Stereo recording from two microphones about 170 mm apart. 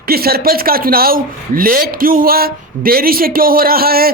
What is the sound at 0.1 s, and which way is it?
Speech, 65° right (ahead or behind).